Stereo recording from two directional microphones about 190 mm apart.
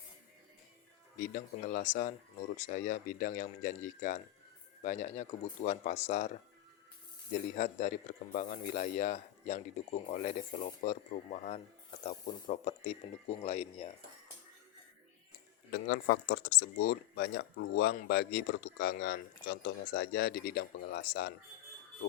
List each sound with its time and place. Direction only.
1.2 s speech: 45° left (ahead or behind)
7.5 s speech: 40° left (ahead or behind)
15.7 s speech: 55° left (ahead or behind)